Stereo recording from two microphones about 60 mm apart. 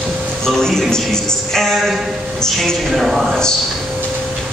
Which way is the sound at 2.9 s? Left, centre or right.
Centre.